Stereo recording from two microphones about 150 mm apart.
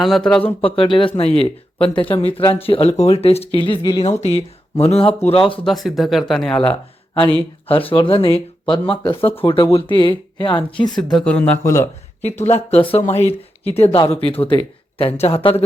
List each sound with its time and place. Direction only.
0.0 s speech: centre (ahead or behind)
0.6 s speech: 35° left (ahead or behind)
4.2 s speech: 45° left (ahead or behind)
5.6 s speech: centre (ahead or behind)
6.6 s speech: 35° left (ahead or behind)
10.8 s speech: centre (ahead or behind)
11.6 s speech: 20° left (ahead or behind)
12.2 s speech: 45° left (ahead or behind)